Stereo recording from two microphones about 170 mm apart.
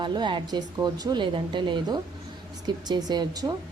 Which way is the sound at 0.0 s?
25° right (ahead or behind).